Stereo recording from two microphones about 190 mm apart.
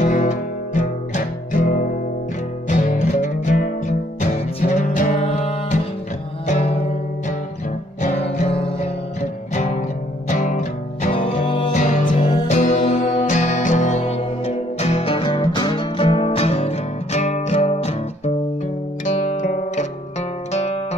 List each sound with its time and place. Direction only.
0.0 s music: 40° left (ahead or behind)
11.1 s music: 25° left (ahead or behind)
11.7 s music: 40° left (ahead or behind)